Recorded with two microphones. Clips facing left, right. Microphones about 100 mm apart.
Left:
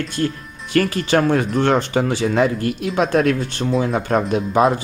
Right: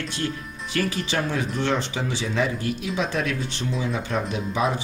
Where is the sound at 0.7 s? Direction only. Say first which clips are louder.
Left 9 dB; 55° left (ahead or behind).